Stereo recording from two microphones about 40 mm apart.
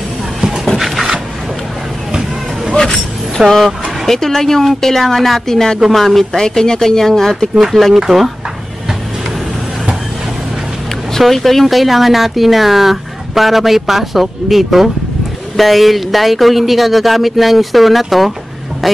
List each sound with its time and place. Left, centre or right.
0.7 s a sound: centre
2.7 s vehicle: centre
3.4 s a woman's voice: centre
6.3 s a woman's voice: centre
7.5 s speech: centre
11.1 s speech: centre